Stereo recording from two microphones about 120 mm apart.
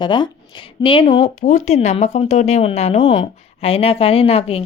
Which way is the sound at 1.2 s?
90° left.